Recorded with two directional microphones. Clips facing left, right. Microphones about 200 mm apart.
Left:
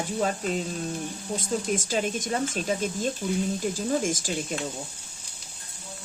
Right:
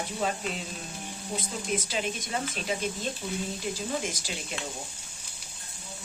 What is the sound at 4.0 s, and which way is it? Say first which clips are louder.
Speech: left 7 dB; 50° left (ahead or behind).